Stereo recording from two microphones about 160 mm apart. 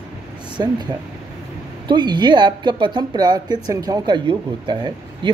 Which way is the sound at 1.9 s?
30° right (ahead or behind).